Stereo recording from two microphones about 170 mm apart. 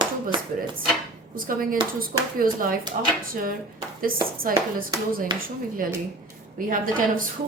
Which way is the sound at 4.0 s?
55° right (ahead or behind).